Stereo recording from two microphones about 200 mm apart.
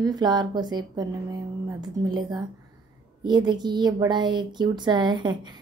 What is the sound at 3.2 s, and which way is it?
Speech, 20° right (ahead or behind).